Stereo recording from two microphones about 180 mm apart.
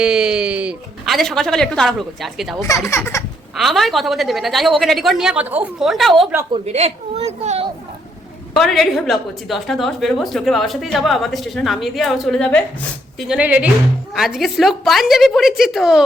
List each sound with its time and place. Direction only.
0.0 s speech: 5° right (ahead or behind)
2.6 s speech: 15° left (ahead or behind)
3.6 s a woman's voice: centre (ahead or behind)
6.5 s a woman's voice: 35° right (ahead or behind)
8.5 s a woman's voice: centre (ahead or behind)